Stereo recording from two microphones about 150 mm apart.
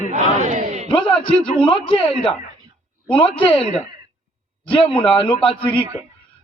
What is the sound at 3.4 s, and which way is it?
Speech, 40° left (ahead or behind).